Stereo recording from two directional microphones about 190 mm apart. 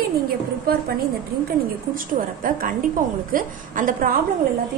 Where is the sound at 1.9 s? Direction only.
45° right (ahead or behind).